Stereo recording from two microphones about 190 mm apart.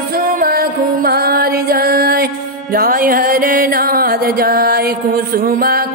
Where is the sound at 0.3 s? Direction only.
50° right (ahead or behind).